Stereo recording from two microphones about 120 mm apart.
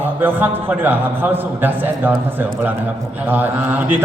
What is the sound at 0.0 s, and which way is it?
A man's voice, 15° right (ahead or behind).